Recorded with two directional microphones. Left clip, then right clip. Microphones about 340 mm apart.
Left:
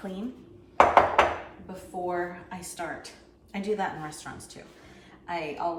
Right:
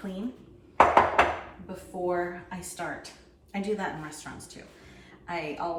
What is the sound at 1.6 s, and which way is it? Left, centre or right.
Speech, centre.